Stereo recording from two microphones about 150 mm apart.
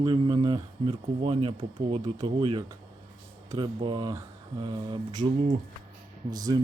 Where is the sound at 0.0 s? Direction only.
30° right (ahead or behind).